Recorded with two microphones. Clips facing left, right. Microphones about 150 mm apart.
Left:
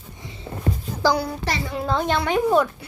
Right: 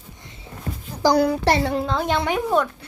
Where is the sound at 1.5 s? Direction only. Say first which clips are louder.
Right 8 dB; 55° right (ahead or behind).